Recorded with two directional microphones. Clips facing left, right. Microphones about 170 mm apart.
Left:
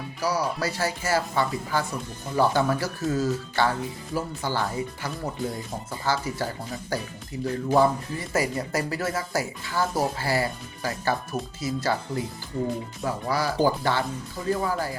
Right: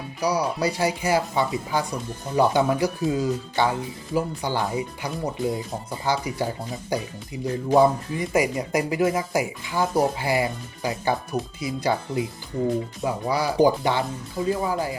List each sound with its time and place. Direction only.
0.2 s speech: 15° right (ahead or behind)